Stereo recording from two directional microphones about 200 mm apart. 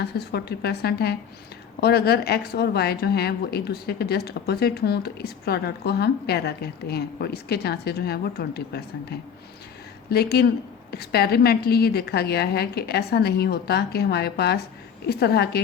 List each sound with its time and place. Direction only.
0.0 s a woman's voice: 55° left (ahead or behind)